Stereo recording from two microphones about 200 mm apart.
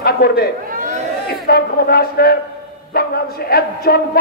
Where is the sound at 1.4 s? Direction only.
50° left (ahead or behind).